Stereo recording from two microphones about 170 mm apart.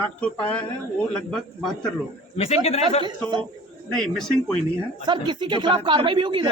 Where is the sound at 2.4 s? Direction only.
35° left (ahead or behind).